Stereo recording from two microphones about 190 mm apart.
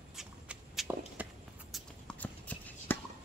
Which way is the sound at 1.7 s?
5° left (ahead or behind).